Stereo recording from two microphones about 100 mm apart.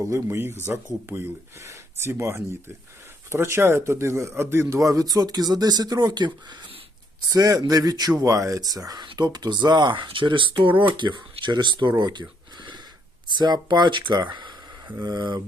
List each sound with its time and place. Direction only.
0.0 s speech: 30° right (ahead or behind); by 6.7 s 50° right (ahead or behind)
7.3 s speech: 35° right (ahead or behind)
12.5 s a sound: 45° right (ahead or behind)
13.3 s speech: 45° right (ahead or behind)